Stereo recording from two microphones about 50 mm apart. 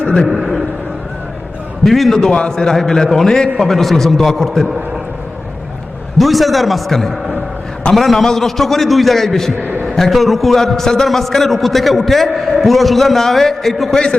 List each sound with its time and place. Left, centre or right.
0.3 s a sound: centre
1.8 s a man's voice: centre
2.3 s a man's voice: centre
6.1 s a man's voice: centre
9.6 s a sound: right
9.8 s a man's voice: centre